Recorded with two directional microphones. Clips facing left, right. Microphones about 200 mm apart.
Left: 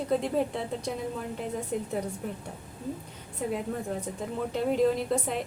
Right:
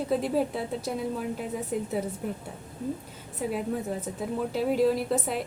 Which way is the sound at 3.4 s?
5° right (ahead or behind).